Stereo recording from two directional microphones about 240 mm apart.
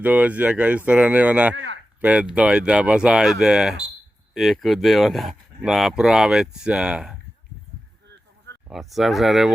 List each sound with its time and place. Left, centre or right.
0.0 s speech: centre
1.5 s speech: right
2.0 s speech: centre
8.6 s speech: centre